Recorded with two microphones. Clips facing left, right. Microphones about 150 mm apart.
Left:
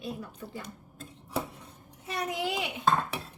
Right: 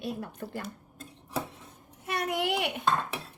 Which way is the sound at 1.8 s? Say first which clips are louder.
Right 2 dB; 65° right (ahead or behind).